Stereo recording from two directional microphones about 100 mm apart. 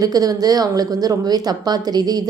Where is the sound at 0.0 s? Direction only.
40° right (ahead or behind).